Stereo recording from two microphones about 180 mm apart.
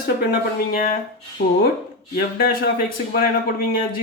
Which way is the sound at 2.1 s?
55° left (ahead or behind).